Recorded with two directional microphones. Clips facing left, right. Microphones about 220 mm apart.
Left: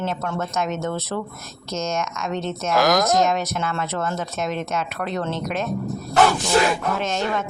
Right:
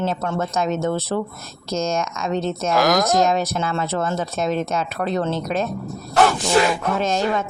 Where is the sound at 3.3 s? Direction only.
35° right (ahead or behind).